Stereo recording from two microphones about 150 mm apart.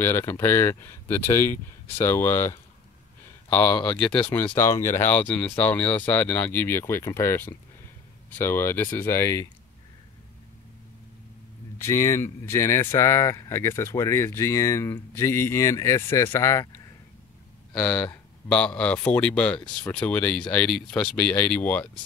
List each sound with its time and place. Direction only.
0.0 s speech: 15° left (ahead or behind)
11.8 s speech: 20° left (ahead or behind)
17.7 s speech: 10° left (ahead or behind)